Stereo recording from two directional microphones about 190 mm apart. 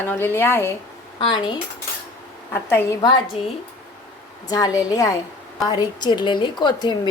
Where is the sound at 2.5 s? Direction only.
10° left (ahead or behind).